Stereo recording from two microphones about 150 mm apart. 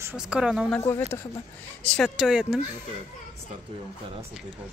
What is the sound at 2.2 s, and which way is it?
Speech, 5° right (ahead or behind).